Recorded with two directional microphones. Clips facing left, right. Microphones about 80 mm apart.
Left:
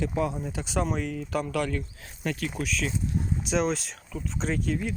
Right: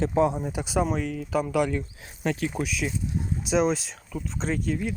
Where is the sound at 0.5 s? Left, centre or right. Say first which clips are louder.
Right 3 dB; centre.